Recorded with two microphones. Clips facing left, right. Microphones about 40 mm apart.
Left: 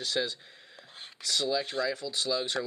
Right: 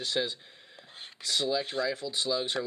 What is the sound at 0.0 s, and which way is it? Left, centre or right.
Speech, centre.